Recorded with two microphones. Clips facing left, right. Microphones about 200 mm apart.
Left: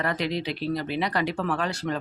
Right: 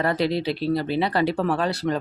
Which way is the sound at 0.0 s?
35° right (ahead or behind).